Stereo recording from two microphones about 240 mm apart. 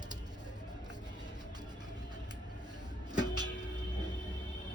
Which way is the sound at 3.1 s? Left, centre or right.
Centre.